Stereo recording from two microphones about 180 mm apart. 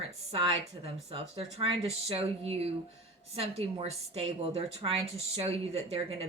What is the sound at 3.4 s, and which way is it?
A woman's voice, 35° right (ahead or behind).